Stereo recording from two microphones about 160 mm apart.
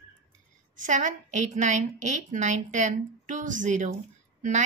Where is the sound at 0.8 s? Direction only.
50° right (ahead or behind).